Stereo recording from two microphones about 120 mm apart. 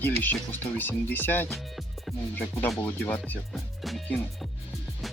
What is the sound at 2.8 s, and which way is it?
Speech, 15° left (ahead or behind).